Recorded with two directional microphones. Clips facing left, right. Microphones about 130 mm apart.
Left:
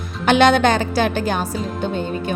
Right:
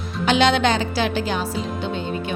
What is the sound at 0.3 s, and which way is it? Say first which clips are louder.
Speech: left 4 dB; 50° left (ahead or behind).